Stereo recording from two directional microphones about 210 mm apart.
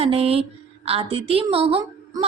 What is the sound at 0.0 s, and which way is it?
A woman's voice, 30° right (ahead or behind).